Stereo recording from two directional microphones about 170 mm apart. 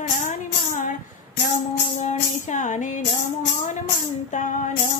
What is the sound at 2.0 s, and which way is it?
Music, 45° left (ahead or behind).